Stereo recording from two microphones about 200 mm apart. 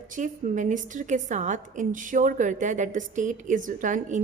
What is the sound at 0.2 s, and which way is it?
A woman's voice, 40° right (ahead or behind).